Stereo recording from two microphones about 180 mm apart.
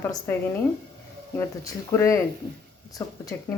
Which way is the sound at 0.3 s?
10° left (ahead or behind).